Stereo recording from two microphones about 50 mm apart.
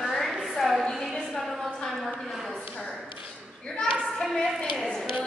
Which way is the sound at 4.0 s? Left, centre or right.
Centre.